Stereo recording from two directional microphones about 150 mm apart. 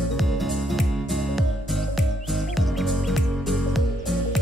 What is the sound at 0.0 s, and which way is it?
Music, centre (ahead or behind).